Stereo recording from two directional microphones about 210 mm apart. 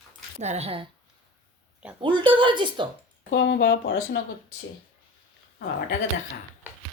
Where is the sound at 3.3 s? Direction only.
55° left (ahead or behind).